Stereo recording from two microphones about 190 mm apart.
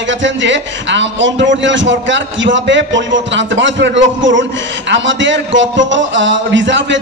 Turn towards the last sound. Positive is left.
turn(degrees=-75)  # may be behind; listen again after turning